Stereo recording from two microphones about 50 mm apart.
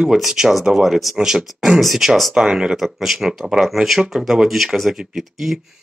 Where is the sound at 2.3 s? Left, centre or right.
Centre.